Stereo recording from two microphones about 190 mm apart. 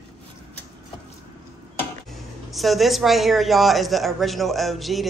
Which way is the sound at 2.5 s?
Centre (ahead or behind).